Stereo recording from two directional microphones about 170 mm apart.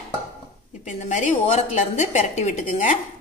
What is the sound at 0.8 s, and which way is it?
A woman's voice, 45° left (ahead or behind).